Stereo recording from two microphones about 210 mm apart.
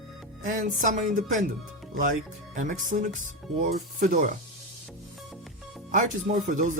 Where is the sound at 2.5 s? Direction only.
40° right (ahead or behind).